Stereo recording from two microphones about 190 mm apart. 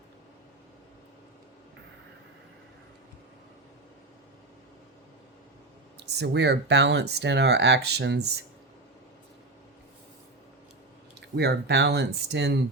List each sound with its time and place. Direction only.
6.0 s speech: 60° right (ahead or behind)
11.3 s speech: 60° right (ahead or behind)